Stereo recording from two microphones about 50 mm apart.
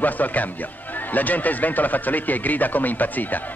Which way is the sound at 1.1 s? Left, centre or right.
Left.